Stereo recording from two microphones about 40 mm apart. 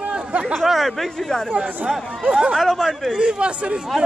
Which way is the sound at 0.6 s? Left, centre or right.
Centre.